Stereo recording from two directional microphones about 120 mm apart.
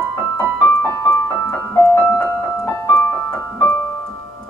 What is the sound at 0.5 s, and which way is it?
Music, 15° left (ahead or behind).